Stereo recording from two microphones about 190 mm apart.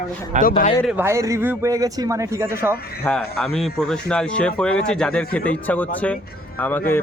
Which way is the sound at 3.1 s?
10° left (ahead or behind).